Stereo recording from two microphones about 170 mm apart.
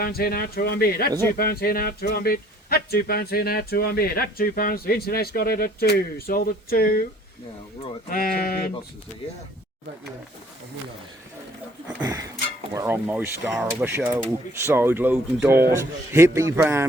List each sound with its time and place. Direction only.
0.0 s speech: 60° left (ahead or behind)
8.1 s speech: 60° left (ahead or behind)
11.9 s speech: 20° right (ahead or behind)